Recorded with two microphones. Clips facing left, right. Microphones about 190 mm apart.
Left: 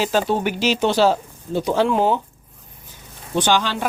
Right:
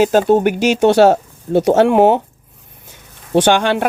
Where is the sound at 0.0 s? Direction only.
50° right (ahead or behind).